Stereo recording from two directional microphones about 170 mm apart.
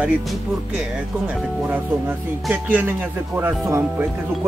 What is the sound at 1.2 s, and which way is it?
Speech, 10° right (ahead or behind).